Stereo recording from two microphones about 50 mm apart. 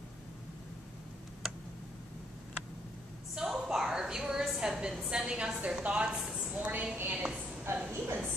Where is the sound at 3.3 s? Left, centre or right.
Centre.